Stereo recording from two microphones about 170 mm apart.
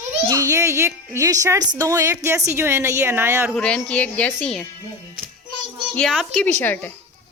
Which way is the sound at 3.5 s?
5° left (ahead or behind).